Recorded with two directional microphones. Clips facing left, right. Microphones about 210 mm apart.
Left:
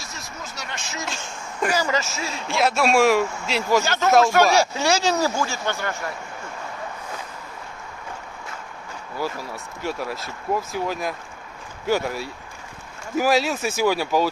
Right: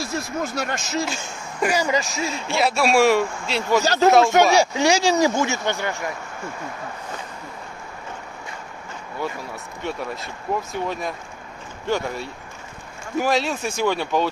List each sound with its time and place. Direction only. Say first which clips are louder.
0.0 s speech: right 11 dB; 55° right (ahead or behind)
1.0 s speech: right 3 dB; centre (ahead or behind)
1.7 s speech: right 2 dB; 10° right (ahead or behind)
2.0 s speech: right 3 dB; centre (ahead or behind)
3.8 s speech: right 6 dB; 35° right (ahead or behind)
4.6 s speech: right 2 dB; 15° right (ahead or behind)
9.2 s speech: left 1 dB; 5° left (ahead or behind)